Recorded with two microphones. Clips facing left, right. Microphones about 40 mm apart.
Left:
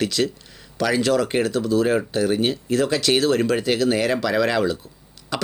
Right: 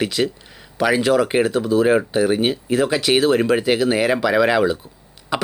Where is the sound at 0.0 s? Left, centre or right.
Centre.